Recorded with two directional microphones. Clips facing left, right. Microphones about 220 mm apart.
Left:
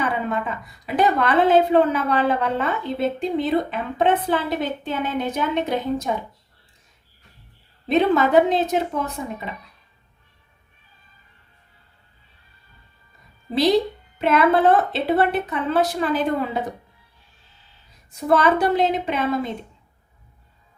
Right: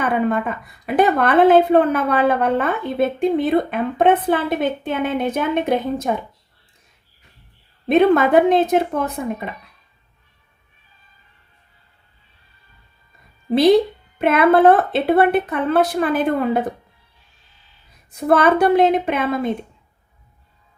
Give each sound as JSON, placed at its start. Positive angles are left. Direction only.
{"t": 0.0, "sound": "a woman's voice", "side_deg": -55}
{"t": 7.9, "sound": "a woman's voice", "side_deg": -55}
{"t": 14.2, "sound": "a woman's voice", "side_deg": -55}
{"t": 18.3, "sound": "a woman's voice", "side_deg": -55}